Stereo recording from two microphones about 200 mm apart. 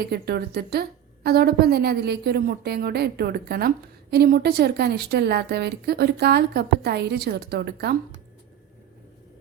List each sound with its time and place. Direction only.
0.0 s a woman's voice: 50° right (ahead or behind)